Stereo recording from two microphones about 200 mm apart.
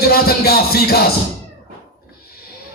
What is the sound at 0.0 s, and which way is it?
Speech, 50° left (ahead or behind).